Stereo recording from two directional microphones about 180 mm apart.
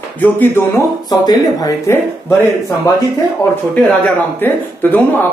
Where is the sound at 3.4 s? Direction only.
15° left (ahead or behind).